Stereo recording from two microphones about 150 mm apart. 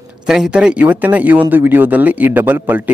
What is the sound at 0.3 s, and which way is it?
A man's voice, 5° right (ahead or behind).